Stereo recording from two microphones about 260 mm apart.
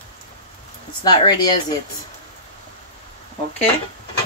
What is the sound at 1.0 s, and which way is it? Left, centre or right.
Speech, centre.